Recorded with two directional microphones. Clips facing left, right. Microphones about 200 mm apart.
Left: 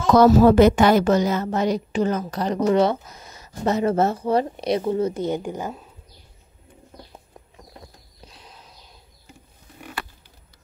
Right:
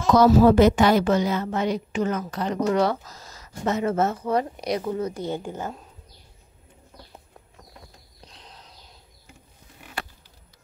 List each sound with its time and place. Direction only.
0.1 s a woman's voice: 55° left (ahead or behind); by 2.8 s 35° left (ahead or behind)
2.8 s speech: 20° left (ahead or behind)
8.3 s a sound: 10° left (ahead or behind)